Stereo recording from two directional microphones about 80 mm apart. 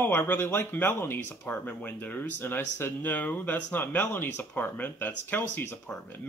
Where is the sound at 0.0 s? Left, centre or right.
Left.